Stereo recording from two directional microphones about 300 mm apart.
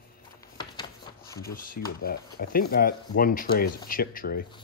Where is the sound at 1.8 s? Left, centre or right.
Left.